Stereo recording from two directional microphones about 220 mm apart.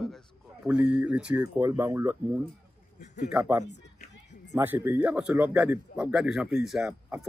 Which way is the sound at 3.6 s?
50° left (ahead or behind).